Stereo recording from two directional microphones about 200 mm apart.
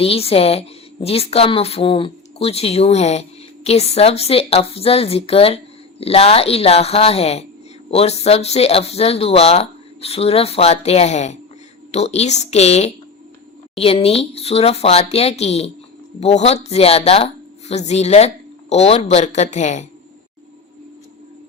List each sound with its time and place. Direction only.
0.0 s a woman's voice: 30° left (ahead or behind)